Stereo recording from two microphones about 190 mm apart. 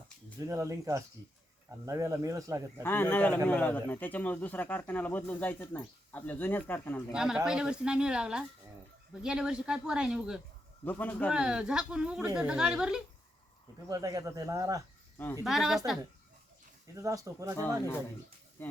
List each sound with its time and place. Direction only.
0.3 s speech: 15° right (ahead or behind)
2.8 s a man's voice: 10° left (ahead or behind)
7.1 s speech: 5° right (ahead or behind)
10.8 s a man's voice: 10° left (ahead or behind)
11.3 s speech: 5° right (ahead or behind)
13.8 s speech: 20° right (ahead or behind)
15.4 s speech: centre (ahead or behind)
16.9 s speech: 15° right (ahead or behind)
18.6 s a man's voice: 10° left (ahead or behind)